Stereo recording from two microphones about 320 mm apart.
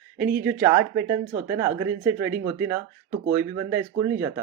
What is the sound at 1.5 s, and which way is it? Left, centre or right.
Speech, centre.